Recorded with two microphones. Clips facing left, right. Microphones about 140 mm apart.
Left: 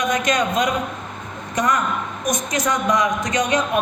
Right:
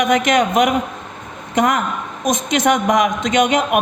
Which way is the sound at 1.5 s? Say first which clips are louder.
Right 4 dB; 90° right.